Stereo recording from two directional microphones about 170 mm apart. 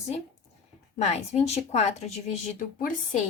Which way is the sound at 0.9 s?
40° left (ahead or behind).